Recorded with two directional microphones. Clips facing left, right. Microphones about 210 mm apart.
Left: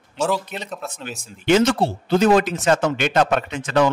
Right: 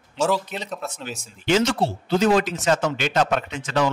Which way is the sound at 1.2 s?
55° left (ahead or behind).